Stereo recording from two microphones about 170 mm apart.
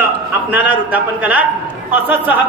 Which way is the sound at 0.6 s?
10° right (ahead or behind).